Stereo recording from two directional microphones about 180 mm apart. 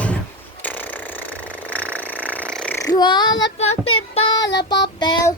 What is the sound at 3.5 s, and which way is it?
Child singing, 35° left (ahead or behind).